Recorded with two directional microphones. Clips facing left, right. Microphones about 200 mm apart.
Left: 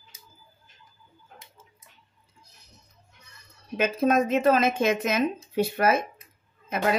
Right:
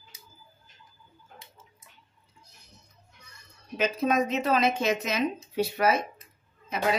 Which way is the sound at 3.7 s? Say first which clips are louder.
Left 3 dB; 50° left (ahead or behind).